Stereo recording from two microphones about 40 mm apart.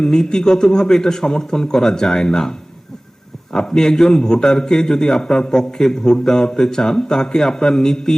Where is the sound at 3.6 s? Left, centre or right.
Centre.